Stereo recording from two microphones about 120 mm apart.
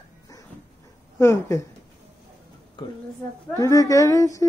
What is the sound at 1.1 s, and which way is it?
Speech, 20° left (ahead or behind).